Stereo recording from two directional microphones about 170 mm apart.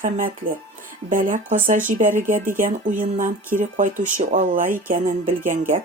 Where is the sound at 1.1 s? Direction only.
50° right (ahead or behind).